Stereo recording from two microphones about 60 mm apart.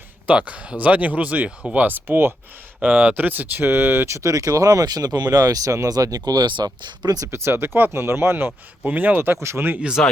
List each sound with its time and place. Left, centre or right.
0.3 s speech: centre; by 4.1 s right
4.1 s speech: right
7.3 s speech: right
8.8 s speech: right
10.0 s speech: centre